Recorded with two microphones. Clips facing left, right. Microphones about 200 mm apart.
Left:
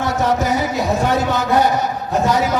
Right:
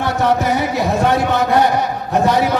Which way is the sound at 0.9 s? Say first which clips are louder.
Right 2 dB; 60° right (ahead or behind).